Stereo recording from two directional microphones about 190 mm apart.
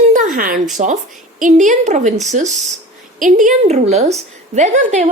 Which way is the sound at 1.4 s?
40° right (ahead or behind).